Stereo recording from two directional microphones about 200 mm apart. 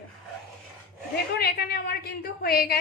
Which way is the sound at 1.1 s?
50° left (ahead or behind).